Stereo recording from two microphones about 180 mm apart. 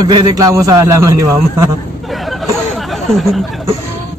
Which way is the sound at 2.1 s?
Centre (ahead or behind).